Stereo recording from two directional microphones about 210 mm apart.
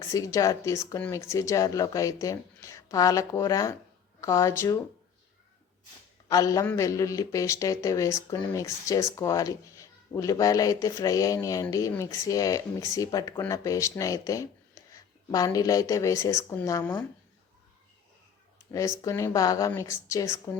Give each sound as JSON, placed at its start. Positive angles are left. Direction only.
{"t": 0.0, "sound": "speech", "side_deg": 15}
{"t": 6.2, "sound": "speech", "side_deg": 15}
{"t": 19.0, "sound": "speech", "side_deg": 15}